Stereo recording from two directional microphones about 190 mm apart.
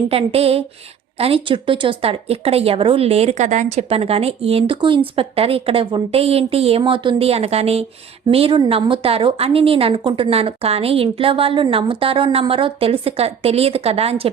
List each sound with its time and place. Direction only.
0.1 s a woman's voice: 30° right (ahead or behind)